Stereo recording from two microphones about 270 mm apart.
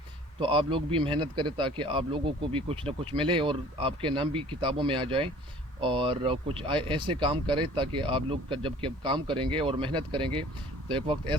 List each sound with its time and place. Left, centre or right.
0.3 s speech: centre